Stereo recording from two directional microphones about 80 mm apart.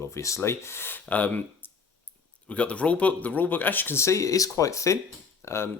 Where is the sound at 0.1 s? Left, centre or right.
Left; by 1.4 s centre.